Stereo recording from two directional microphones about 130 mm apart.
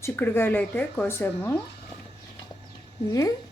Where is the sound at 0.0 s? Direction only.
15° left (ahead or behind).